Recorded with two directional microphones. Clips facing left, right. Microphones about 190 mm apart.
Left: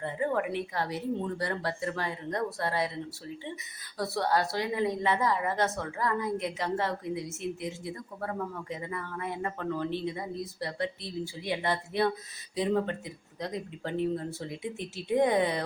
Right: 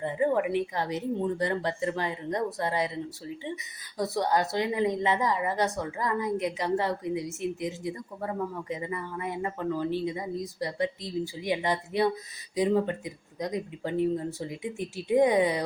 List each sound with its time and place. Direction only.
0.0 s speech: 15° right (ahead or behind)
3.9 s speech: 15° right (ahead or behind)